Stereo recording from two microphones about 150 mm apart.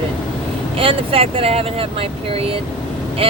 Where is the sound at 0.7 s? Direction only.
35° right (ahead or behind).